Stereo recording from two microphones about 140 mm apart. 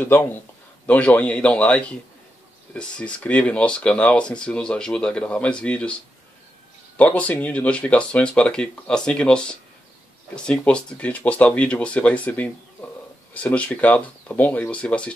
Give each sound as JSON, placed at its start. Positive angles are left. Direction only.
{"t": 0.0, "sound": "speech", "side_deg": 15}
{"t": 7.0, "sound": "speech", "side_deg": 10}